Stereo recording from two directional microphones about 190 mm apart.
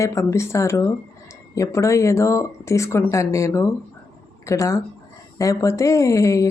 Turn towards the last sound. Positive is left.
turn(degrees=15)  # may be behind; listen again after turning